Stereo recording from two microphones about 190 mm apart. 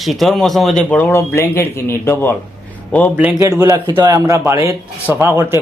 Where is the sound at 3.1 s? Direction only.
10° right (ahead or behind).